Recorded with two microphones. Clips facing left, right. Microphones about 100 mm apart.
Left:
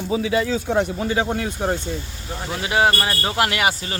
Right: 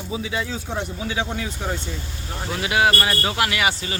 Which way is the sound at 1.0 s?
45° left (ahead or behind).